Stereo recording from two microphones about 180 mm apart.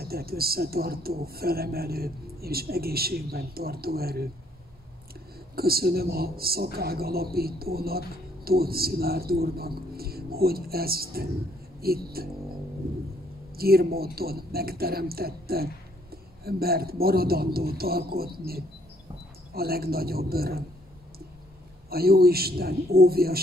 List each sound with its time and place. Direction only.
0.0 s speech: 60° right (ahead or behind)
5.6 s speech: 60° right (ahead or behind)
13.6 s speech: 60° right (ahead or behind)
21.8 s speech: 60° right (ahead or behind)